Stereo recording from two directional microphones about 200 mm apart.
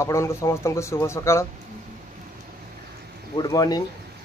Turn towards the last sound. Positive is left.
turn(degrees=20)  # may be behind; listen again after turning